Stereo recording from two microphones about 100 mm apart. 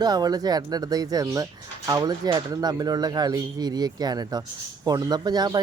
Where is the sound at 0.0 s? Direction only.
40° right (ahead or behind).